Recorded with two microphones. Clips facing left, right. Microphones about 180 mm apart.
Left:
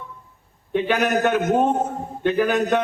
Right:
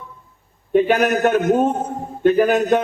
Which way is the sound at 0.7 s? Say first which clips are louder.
Right 5 dB; 45° right (ahead or behind).